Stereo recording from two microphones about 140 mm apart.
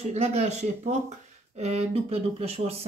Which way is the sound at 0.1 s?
50° right (ahead or behind).